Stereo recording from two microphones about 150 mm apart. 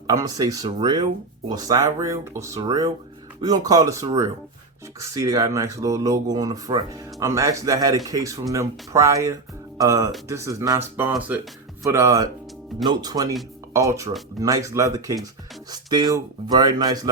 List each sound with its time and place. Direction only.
0.1 s speech: 25° right (ahead or behind)